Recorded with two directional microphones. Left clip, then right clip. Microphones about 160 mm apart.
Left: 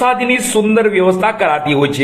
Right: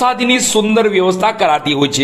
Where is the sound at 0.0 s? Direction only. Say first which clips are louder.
Even; 45° right (ahead or behind).